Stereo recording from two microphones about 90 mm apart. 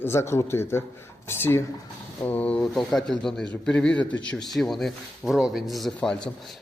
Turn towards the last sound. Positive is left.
turn(degrees=10)  # may be behind; listen again after turning